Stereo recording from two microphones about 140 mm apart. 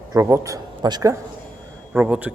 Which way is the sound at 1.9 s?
10° right (ahead or behind).